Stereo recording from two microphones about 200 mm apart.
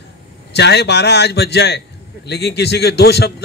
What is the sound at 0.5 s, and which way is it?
Speech, 55° left (ahead or behind).